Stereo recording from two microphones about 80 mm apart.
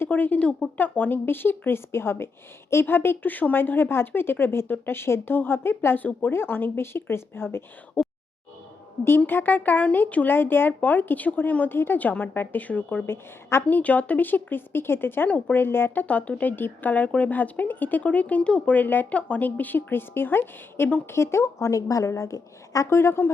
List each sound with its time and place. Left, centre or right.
0.0 s speech: left
9.0 s speech: left
13.1 s speech: left
16.0 s speech: centre; by 23.0 s left
23.0 s speech: left